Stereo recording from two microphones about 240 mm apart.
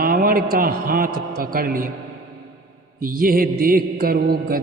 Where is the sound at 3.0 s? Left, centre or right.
Right.